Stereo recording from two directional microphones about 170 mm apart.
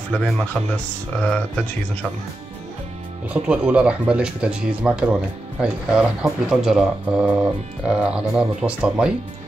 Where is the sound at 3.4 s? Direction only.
5° right (ahead or behind).